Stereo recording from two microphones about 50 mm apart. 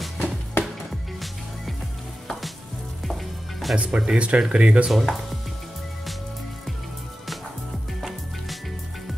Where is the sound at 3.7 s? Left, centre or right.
Right.